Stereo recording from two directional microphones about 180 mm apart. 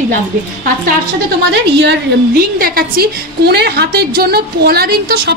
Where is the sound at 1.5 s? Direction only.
70° right (ahead or behind).